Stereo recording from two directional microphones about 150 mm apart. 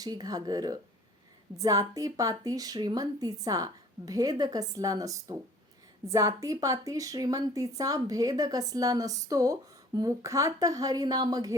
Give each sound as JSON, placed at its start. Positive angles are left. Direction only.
{"t": 0.0, "sound": "a woman's voice", "side_deg": -25}